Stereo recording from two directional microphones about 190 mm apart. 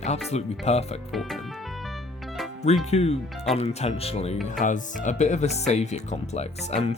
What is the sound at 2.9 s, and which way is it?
Speech, 35° left (ahead or behind).